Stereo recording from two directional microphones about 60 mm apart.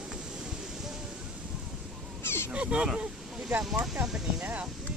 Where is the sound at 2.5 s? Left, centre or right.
Centre.